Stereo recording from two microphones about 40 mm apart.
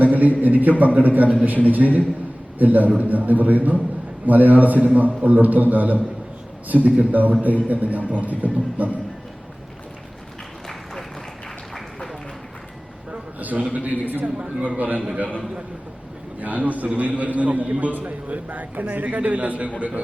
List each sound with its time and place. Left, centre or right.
0.0 s a man's voice: right
13.4 s a sound: right
13.7 s a man's voice: right
14.3 s a man's voice: right
16.4 s a man's voice: right